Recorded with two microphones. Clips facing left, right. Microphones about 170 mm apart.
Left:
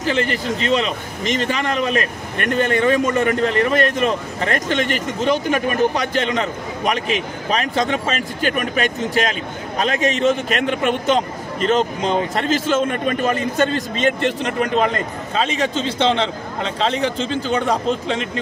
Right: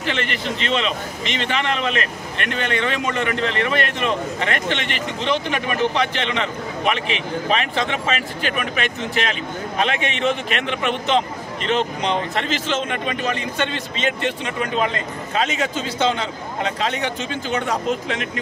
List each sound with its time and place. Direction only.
0.0 s a man's voice: 40° left (ahead or behind)